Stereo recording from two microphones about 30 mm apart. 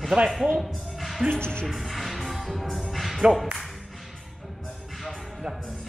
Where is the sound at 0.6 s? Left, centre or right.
Centre.